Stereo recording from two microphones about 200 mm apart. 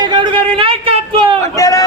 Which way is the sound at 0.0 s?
20° right (ahead or behind).